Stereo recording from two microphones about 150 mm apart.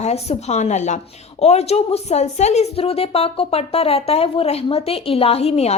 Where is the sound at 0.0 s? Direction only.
45° left (ahead or behind).